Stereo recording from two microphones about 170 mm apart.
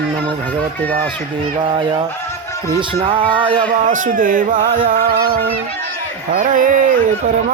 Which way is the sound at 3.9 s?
50° right (ahead or behind).